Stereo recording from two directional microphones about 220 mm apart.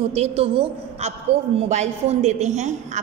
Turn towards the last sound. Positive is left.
turn(degrees=-30)  # may be behind; listen again after turning